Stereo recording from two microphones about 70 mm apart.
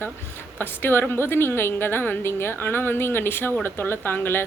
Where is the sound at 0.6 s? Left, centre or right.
Left.